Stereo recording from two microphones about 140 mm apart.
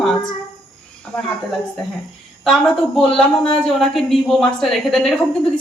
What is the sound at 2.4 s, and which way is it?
A woman's voice, centre (ahead or behind).